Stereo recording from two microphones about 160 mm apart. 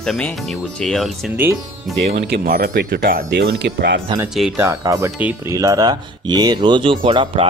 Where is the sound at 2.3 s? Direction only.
70° right (ahead or behind); by 4.0 s 90° right.